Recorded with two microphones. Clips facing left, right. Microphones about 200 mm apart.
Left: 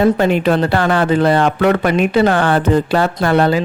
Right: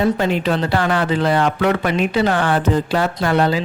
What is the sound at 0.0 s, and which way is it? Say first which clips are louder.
Speech: left 5 dB; 55° left (ahead or behind).